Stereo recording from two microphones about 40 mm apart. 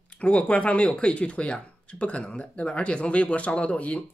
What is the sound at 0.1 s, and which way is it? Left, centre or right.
Speech, left.